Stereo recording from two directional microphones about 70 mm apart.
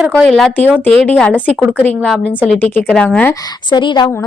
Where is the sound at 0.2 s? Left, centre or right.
Centre.